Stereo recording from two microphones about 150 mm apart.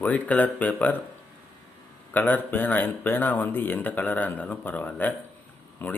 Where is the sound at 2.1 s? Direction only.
10° left (ahead or behind).